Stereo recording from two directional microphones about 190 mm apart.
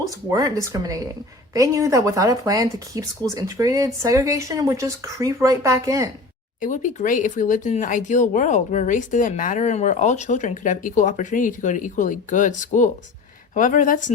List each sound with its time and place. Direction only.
0.3 s speech: 20° right (ahead or behind)
6.6 s speech: 40° left (ahead or behind)